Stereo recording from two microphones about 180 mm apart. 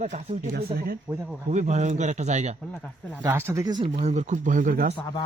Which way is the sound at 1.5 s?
40° right (ahead or behind).